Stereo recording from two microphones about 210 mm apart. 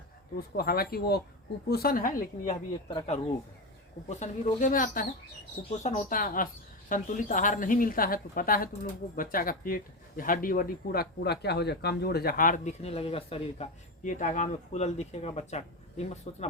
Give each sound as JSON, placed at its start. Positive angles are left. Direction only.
{"t": 0.3, "sound": "speech", "side_deg": 45}
{"t": 4.1, "sound": "speech", "side_deg": 35}